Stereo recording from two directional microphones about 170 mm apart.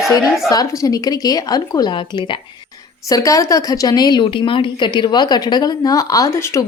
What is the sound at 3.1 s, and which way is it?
Speech, 20° left (ahead or behind).